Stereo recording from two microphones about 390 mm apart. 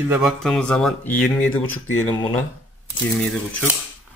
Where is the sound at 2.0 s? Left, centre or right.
Centre.